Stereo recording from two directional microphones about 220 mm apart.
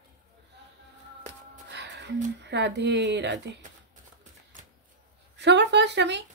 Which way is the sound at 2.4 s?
50° right (ahead or behind).